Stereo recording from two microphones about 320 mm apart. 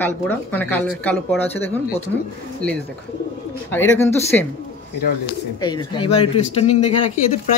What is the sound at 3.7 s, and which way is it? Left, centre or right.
Speech, centre.